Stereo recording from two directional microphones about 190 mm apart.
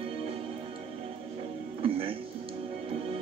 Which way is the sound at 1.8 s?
30° right (ahead or behind).